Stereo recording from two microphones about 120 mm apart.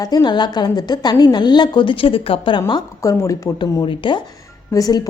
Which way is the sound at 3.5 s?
40° left (ahead or behind).